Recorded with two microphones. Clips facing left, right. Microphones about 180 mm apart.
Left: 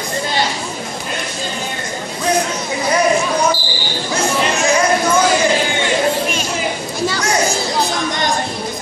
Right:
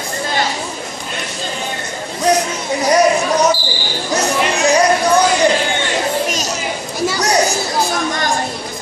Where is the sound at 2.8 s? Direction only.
40° right (ahead or behind).